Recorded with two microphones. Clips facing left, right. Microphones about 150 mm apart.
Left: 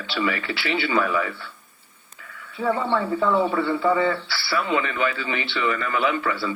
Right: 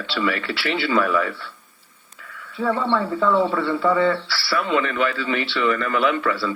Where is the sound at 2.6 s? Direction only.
35° right (ahead or behind).